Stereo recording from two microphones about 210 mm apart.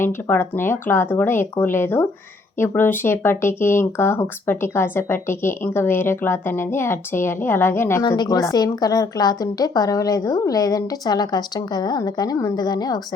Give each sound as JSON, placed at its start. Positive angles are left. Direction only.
{"t": 0.0, "sound": "speech", "side_deg": 10}